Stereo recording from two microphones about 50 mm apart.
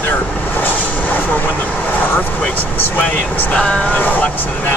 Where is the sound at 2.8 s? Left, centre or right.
Left.